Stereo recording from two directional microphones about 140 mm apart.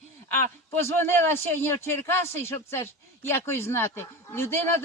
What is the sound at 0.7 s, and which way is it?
A man's voice, 15° left (ahead or behind).